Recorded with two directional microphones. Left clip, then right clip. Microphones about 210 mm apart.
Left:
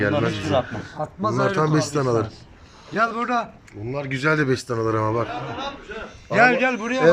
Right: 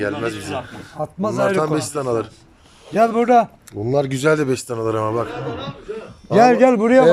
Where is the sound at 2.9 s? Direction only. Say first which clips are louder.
Right 7 dB; 35° right (ahead or behind).